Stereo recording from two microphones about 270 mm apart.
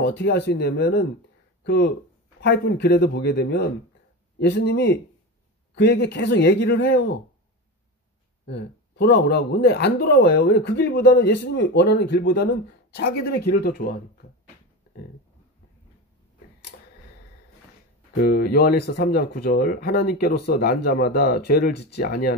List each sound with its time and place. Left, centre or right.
0.0 s speech: left
8.5 s speech: left
18.2 s speech: left